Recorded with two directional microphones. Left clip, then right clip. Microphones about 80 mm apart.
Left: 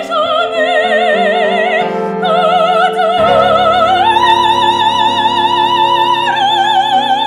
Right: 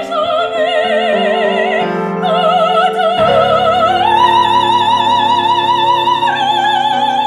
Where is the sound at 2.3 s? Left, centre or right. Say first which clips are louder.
Left 1 dB; left.